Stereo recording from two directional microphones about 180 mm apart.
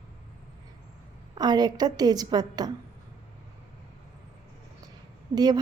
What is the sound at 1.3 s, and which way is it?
A woman's voice, 20° right (ahead or behind).